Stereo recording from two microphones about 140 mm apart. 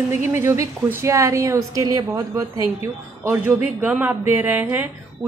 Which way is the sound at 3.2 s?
10° right (ahead or behind).